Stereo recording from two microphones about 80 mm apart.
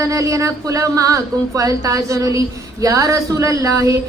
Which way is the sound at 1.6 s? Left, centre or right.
Right.